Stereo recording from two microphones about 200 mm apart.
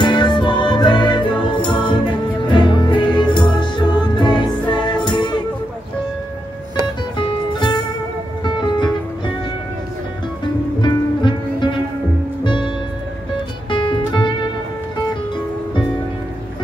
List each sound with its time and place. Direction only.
0.0 s music: 20° left (ahead or behind)
7.2 s music: 25° left (ahead or behind)
10.4 s music: 20° left (ahead or behind)